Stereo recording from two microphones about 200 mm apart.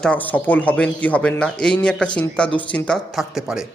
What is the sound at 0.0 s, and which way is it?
Speech, 5° left (ahead or behind).